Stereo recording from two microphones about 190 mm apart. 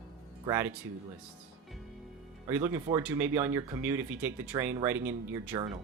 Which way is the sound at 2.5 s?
10° right (ahead or behind).